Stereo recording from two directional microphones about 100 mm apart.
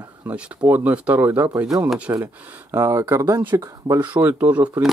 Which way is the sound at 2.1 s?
30° right (ahead or behind).